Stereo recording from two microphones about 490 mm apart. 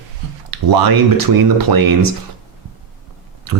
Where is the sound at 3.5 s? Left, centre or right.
Right.